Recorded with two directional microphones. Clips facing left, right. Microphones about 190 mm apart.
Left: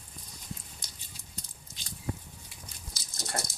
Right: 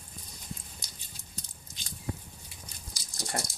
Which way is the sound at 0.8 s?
10° right (ahead or behind).